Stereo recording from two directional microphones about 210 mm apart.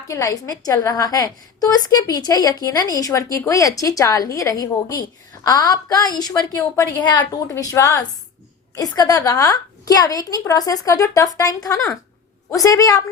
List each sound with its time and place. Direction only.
0.1 s a woman's voice: 15° left (ahead or behind)